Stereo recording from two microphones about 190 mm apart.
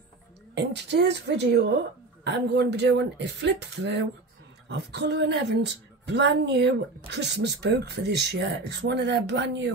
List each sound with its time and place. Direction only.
0.6 s speech: 65° right (ahead or behind)